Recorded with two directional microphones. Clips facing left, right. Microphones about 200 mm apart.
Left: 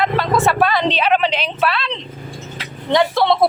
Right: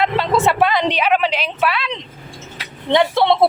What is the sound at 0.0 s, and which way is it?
A woman's voice, 20° right (ahead or behind).